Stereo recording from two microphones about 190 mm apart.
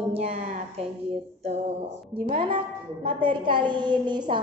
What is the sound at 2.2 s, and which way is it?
A woman's voice, 25° right (ahead or behind).